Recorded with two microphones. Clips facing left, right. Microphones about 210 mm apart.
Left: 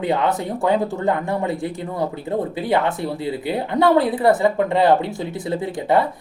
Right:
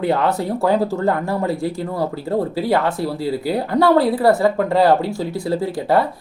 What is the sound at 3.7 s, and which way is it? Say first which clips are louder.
Speech: right 1 dB; centre (ahead or behind).